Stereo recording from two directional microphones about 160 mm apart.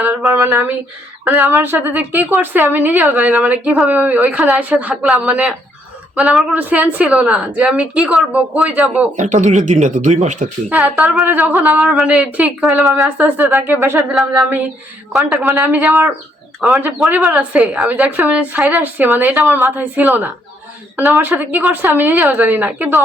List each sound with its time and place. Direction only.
0.0 s a woman's voice: 10° right (ahead or behind)
9.1 s speech: 50° right (ahead or behind)
10.7 s a woman's voice: 5° right (ahead or behind)
12.9 s a woman's voice: 15° right (ahead or behind)
14.1 s speech: centre (ahead or behind)
15.4 s a woman's voice: 10° right (ahead or behind)
16.6 s a woman's voice: centre (ahead or behind)